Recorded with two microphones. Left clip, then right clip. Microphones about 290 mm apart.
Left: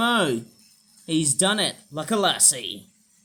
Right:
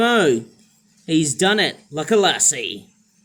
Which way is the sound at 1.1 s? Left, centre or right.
Centre.